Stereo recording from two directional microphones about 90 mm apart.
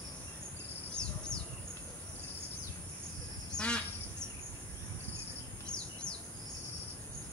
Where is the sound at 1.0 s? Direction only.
55° left (ahead or behind).